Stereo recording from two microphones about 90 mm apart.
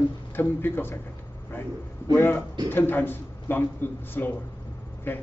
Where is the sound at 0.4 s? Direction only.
25° left (ahead or behind).